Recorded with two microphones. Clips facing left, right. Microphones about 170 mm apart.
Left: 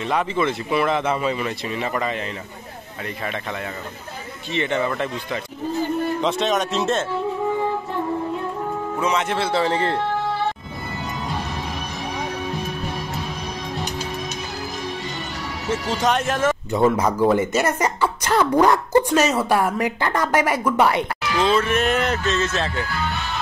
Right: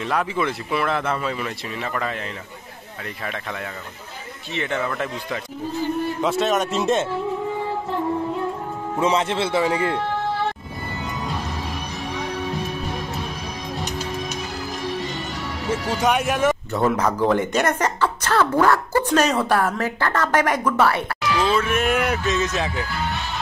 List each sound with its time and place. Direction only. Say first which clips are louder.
0.3 s speech: left 2 dB; 5° right (ahead or behind)
4.5 s speech: left 3 dB; 5° right (ahead or behind)
9.0 s a man's voice: right 2 dB; 30° right (ahead or behind)
9.5 s speech: left 1 dB; 10° right (ahead or behind)
15.7 s speech: even; 10° right (ahead or behind)
16.7 s speech: left 2 dB; 10° left (ahead or behind)
21.4 s speech: left 2 dB; 5° right (ahead or behind)